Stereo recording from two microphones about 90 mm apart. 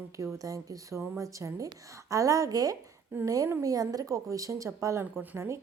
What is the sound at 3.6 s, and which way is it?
A woman's voice, 40° right (ahead or behind).